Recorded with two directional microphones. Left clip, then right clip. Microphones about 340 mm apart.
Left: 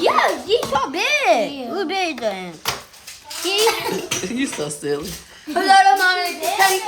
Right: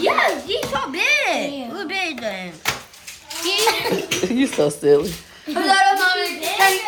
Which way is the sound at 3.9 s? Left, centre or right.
Centre.